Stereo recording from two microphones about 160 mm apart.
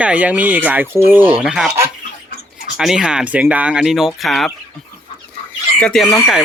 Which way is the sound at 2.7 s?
5° right (ahead or behind).